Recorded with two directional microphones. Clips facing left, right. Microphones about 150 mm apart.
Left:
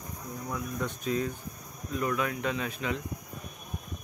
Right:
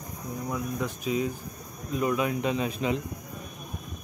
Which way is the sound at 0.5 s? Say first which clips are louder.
Right 2 dB; 5° right (ahead or behind).